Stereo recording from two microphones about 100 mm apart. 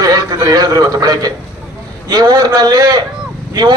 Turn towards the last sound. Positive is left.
turn(degrees=-45)  # may be behind; listen again after turning